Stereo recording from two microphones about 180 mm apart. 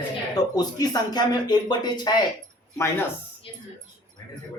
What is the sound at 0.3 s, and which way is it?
Speech, 20° left (ahead or behind).